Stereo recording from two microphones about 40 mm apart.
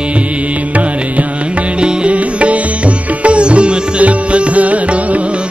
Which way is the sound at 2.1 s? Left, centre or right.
Right.